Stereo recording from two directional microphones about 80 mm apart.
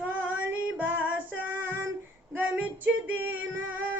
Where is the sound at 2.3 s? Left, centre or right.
Centre.